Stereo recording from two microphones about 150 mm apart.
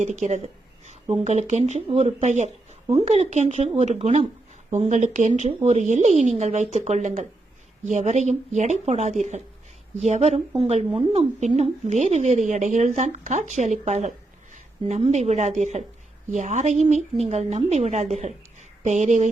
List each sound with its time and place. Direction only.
0.0 s a woman's voice: 50° right (ahead or behind)
2.2 s a woman's voice: 50° right (ahead or behind)